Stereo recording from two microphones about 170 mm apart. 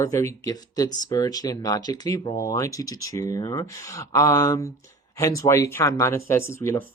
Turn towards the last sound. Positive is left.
turn(degrees=15)  # may be behind; listen again after turning